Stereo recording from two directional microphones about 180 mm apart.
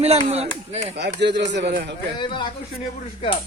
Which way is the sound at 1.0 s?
70° right (ahead or behind).